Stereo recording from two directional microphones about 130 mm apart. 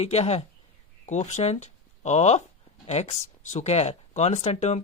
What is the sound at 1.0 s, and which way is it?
Speech, 65° left (ahead or behind).